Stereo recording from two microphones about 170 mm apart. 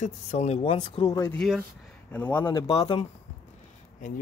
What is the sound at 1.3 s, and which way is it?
Speech, 5° left (ahead or behind).